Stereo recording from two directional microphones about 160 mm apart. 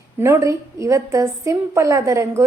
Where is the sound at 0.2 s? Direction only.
20° right (ahead or behind).